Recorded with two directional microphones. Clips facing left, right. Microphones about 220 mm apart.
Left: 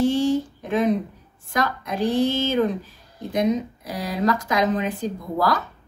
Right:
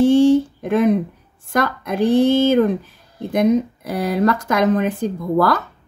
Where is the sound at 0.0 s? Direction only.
50° right (ahead or behind).